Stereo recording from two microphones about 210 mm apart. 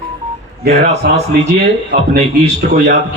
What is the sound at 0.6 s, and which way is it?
Speech, 50° right (ahead or behind).